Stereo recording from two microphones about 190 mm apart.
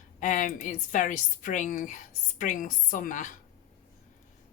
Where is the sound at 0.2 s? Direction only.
40° left (ahead or behind).